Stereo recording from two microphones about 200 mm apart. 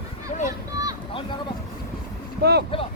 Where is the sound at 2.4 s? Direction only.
55° right (ahead or behind).